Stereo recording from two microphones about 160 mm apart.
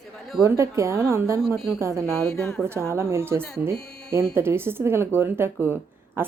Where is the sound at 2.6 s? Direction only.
15° right (ahead or behind).